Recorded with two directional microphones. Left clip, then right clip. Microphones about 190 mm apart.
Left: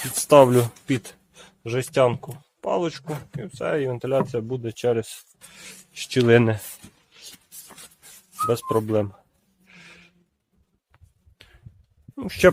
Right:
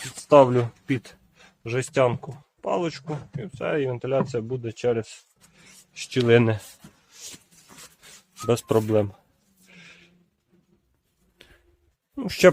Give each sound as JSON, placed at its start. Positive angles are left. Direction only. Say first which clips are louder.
{"t": 0.3, "sound": "speech", "louder": "left 2 dB", "side_deg": 45}
{"t": 6.1, "sound": "speech", "louder": "left 1 dB", "side_deg": 25}
{"t": 8.4, "sound": "speech", "louder": "right 1 dB", "side_deg": -25}
{"t": 8.9, "sound": "speech", "louder": "right 1 dB", "side_deg": -5}
{"t": 9.6, "sound": "a sound", "louder": "left 1 dB", "side_deg": 0}
{"t": 11.4, "sound": "a sound", "louder": "left 1 dB", "side_deg": 0}
{"t": 12.1, "sound": "speech", "louder": "even", "side_deg": 0}